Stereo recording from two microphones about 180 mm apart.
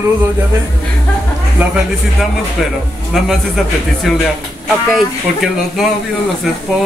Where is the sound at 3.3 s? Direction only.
Centre (ahead or behind).